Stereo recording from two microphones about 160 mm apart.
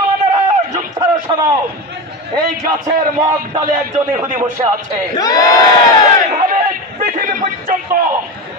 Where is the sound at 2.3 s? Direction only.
25° right (ahead or behind).